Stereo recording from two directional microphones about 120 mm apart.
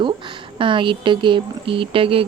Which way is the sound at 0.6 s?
45° right (ahead or behind).